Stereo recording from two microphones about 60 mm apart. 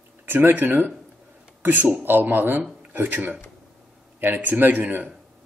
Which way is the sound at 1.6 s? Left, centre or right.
Right.